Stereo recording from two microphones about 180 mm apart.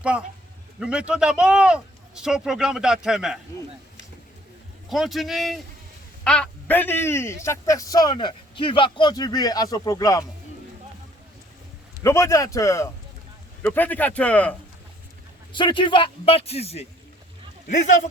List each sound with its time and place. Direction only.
0.0 s a man's voice: 5° right (ahead or behind)
4.9 s a man's voice: centre (ahead or behind); by 10.2 s 20° left (ahead or behind)
12.0 s a man's voice: 15° left (ahead or behind)
15.5 s a man's voice: 25° left (ahead or behind)